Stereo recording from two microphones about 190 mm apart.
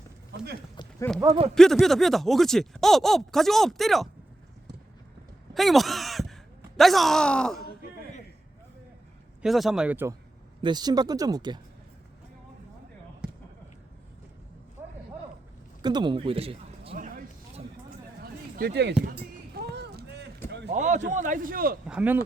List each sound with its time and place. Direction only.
0.3 s speech: 60° right (ahead or behind)
1.1 s speech: 10° left (ahead or behind)
5.5 s a sound: centre (ahead or behind)
6.7 s speech: centre (ahead or behind)
9.4 s speech: centre (ahead or behind)
10.6 s speech: 20° right (ahead or behind)
13.2 s basketball bounce: 5° right (ahead or behind)
15.8 s a man's voice: 25° right (ahead or behind)
16.9 s a sound: 50° right (ahead or behind); by 20.7 s 65° right (ahead or behind)
20.7 s a man's voice: 40° right (ahead or behind)
21.8 s speech: 5° right (ahead or behind)